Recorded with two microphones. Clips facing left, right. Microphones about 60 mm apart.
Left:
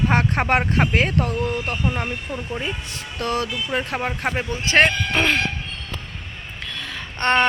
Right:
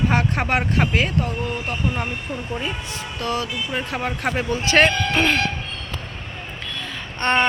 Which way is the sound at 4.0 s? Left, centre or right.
Left.